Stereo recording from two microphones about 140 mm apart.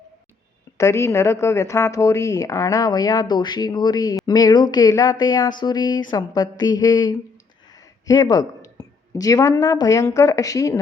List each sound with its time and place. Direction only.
0.8 s a woman's voice: 20° left (ahead or behind)